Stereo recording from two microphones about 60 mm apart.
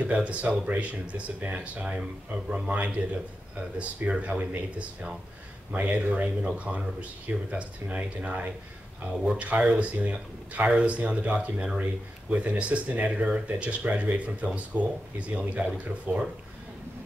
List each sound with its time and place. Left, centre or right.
0.0 s speech: right